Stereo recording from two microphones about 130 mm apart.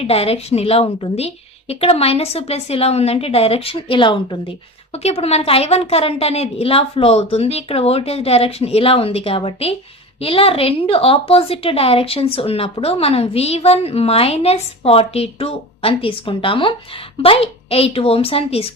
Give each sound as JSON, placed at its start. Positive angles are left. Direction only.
{"t": 0.0, "sound": "a woman's voice", "side_deg": 50}
{"t": 5.0, "sound": "a woman's voice", "side_deg": 50}